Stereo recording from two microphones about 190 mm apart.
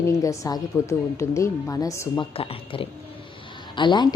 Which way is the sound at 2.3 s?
30° left (ahead or behind).